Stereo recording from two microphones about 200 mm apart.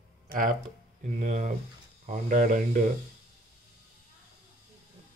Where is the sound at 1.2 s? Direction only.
40° right (ahead or behind).